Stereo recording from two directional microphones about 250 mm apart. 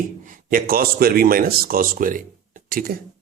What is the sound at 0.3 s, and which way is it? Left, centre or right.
Speech, right.